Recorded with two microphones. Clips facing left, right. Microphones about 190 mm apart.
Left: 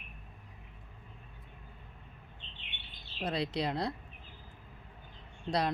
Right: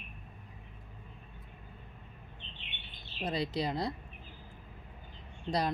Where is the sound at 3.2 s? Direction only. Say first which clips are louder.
Even; centre (ahead or behind).